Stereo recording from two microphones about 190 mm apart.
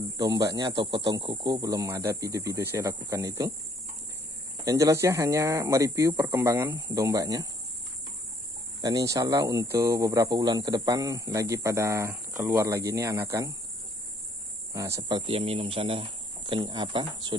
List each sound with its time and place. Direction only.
0.2 s speech: 20° right (ahead or behind)
4.6 s speech: 15° right (ahead or behind)
8.8 s speech: 15° right (ahead or behind)
14.7 s speech: 15° right (ahead or behind)